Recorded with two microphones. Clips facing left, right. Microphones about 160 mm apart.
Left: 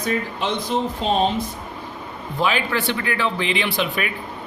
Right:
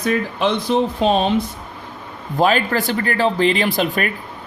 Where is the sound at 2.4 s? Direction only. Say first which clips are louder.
Right 5 dB; 45° right (ahead or behind).